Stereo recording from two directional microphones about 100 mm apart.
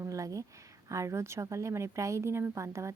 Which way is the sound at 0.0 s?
35° right (ahead or behind).